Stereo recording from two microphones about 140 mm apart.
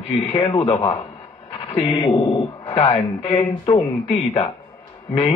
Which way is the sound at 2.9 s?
45° left (ahead or behind).